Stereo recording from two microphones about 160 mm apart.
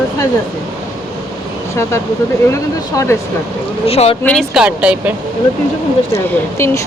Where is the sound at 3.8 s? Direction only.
40° left (ahead or behind).